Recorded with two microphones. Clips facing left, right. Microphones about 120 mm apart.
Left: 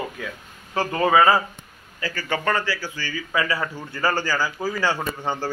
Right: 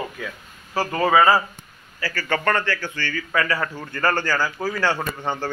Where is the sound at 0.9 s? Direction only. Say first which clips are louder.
Even; 15° left (ahead or behind).